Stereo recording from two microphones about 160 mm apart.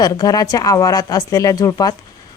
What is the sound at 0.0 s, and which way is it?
Speech, 25° left (ahead or behind).